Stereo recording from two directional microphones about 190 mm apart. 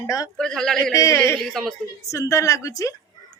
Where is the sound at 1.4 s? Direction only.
Centre (ahead or behind).